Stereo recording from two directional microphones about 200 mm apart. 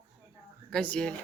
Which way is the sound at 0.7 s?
5° left (ahead or behind).